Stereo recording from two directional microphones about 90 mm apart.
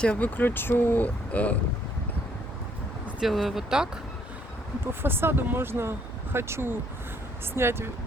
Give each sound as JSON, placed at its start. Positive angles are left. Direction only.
{"t": 0.0, "sound": "speech", "side_deg": 15}
{"t": 3.2, "sound": "speech", "side_deg": 0}
{"t": 4.8, "sound": "speech", "side_deg": -25}